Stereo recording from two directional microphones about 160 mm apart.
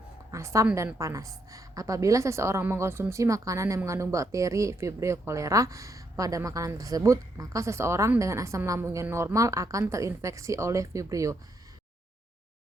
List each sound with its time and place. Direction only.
0.3 s a woman's voice: 20° right (ahead or behind)